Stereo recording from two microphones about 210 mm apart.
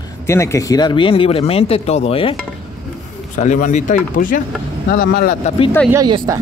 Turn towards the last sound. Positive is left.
turn(degrees=-20)  # may be behind; listen again after turning